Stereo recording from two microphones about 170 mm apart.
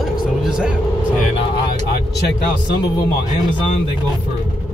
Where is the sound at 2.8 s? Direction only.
20° left (ahead or behind).